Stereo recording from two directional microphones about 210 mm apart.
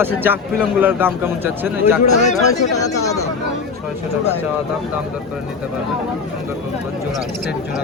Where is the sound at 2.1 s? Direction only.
35° left (ahead or behind).